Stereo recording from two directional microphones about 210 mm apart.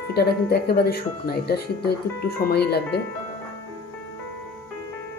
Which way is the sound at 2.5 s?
50° left (ahead or behind).